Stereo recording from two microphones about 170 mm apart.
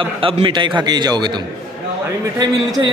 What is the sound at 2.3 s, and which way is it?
Speech, 20° right (ahead or behind).